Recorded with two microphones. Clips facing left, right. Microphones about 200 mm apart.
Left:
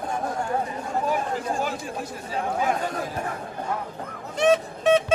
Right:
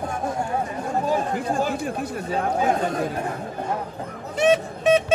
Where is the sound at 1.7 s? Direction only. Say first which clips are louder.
Right 5 dB; 60° right (ahead or behind).